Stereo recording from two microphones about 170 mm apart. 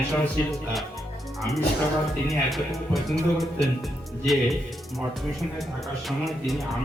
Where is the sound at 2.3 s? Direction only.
Centre (ahead or behind).